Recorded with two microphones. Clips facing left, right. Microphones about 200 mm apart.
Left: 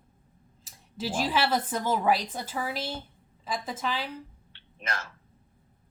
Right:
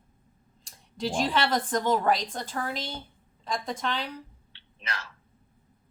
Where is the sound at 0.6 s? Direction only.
5° left (ahead or behind).